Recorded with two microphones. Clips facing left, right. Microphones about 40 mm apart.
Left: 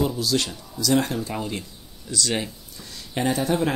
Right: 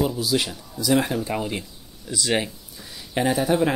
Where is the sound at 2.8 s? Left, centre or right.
Centre.